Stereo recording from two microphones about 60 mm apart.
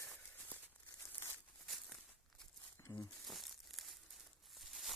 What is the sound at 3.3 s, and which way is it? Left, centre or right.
Crumpling, centre.